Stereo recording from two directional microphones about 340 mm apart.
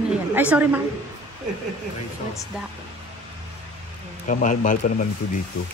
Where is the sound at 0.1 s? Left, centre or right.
Centre.